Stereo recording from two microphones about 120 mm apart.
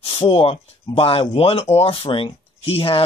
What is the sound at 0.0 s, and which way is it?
Speech, 50° left (ahead or behind).